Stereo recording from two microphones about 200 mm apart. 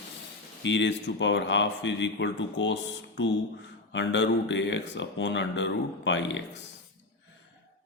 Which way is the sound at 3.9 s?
65° left (ahead or behind).